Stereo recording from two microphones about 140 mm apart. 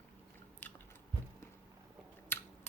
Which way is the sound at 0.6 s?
15° left (ahead or behind).